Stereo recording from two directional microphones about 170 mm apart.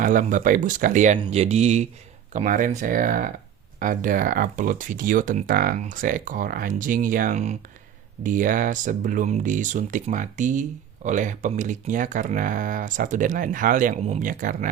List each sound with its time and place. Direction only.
0.0 s speech: 50° right (ahead or behind)